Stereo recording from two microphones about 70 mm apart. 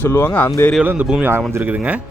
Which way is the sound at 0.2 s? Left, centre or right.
Left.